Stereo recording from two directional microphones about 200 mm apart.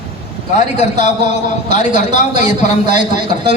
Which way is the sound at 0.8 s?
35° left (ahead or behind).